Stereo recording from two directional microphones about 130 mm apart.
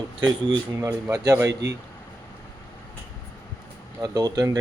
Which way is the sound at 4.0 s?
30° right (ahead or behind).